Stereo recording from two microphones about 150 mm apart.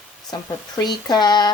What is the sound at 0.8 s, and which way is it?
Speech, 30° left (ahead or behind).